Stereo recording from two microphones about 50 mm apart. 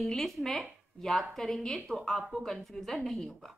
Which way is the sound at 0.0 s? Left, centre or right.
Centre.